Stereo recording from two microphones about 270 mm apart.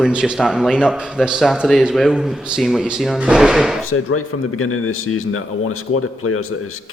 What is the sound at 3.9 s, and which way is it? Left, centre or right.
Speech, left.